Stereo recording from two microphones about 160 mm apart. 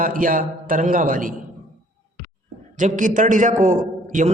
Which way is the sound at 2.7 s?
55° right (ahead or behind).